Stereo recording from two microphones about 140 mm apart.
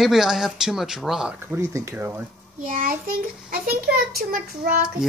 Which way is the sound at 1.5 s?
20° right (ahead or behind).